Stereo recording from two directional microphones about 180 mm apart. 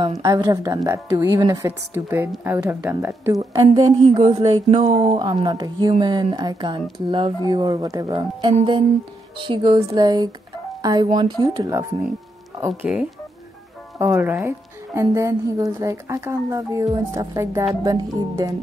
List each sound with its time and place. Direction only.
0.2 s a woman's voice: 20° right (ahead or behind); by 5.2 s 35° right (ahead or behind)
5.2 s speech: 20° right (ahead or behind)
12.8 s a woman's voice: 5° right (ahead or behind)